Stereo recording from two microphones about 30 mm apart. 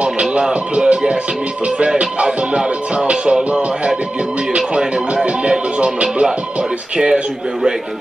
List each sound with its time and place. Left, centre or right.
0.0 s music: right
2.2 s music: right
4.6 s music: right